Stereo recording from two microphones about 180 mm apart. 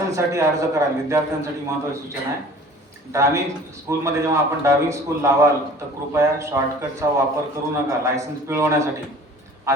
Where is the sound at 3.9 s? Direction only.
15° right (ahead or behind).